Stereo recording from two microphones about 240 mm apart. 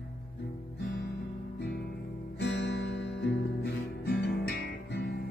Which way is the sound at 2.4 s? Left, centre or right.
Left.